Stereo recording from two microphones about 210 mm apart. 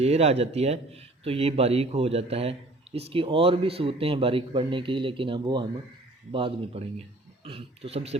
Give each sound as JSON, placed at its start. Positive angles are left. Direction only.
{"t": 0.0, "sound": "speech", "side_deg": -30}